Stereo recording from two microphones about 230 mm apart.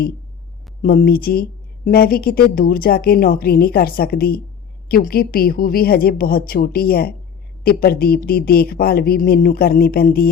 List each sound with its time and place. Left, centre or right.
0.8 s speech: left